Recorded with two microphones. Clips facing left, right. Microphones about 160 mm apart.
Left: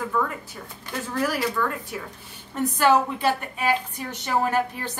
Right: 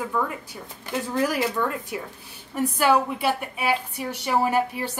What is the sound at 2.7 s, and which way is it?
Speech, 10° right (ahead or behind).